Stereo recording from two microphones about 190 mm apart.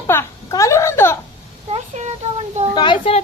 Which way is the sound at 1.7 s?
35° right (ahead or behind).